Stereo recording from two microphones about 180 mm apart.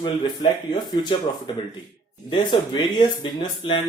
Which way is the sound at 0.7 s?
25° left (ahead or behind).